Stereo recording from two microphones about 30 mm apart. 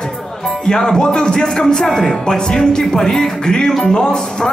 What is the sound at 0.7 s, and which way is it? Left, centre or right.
Speech, left.